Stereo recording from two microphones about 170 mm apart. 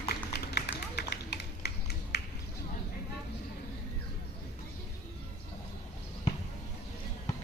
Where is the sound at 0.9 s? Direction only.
75° left (ahead or behind).